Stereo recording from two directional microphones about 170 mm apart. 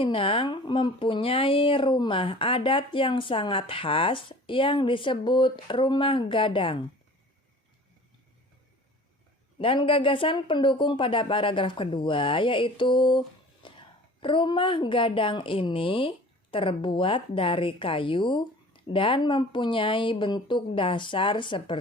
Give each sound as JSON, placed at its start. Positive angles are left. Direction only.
{"t": 0.0, "sound": "speech", "side_deg": 30}
{"t": 9.6, "sound": "speech", "side_deg": 30}